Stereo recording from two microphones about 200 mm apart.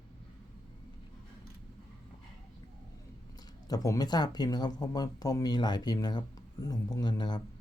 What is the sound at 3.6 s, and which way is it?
Speech, 15° left (ahead or behind).